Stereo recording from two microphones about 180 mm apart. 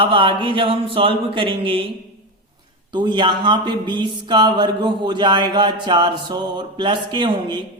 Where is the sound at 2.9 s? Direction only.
25° right (ahead or behind).